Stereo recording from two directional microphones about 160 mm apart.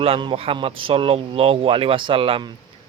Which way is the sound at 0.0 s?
35° right (ahead or behind).